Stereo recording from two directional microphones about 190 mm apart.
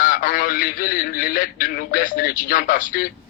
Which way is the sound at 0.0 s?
45° left (ahead or behind).